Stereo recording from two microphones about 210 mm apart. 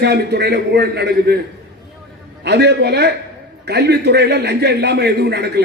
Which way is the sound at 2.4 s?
50° right (ahead or behind).